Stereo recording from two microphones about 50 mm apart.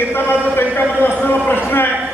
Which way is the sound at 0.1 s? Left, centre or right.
Left.